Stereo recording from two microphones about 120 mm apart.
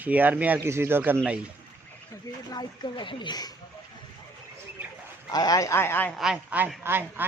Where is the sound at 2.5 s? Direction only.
40° left (ahead or behind).